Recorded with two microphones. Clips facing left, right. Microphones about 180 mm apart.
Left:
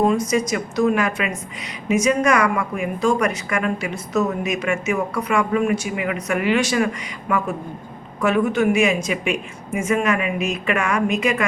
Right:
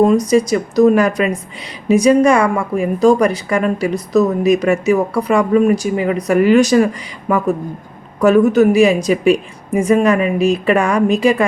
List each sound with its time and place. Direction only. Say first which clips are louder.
0.1 s a woman's voice: right 7 dB; 35° right (ahead or behind)